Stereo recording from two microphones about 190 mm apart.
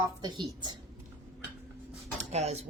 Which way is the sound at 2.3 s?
35° right (ahead or behind).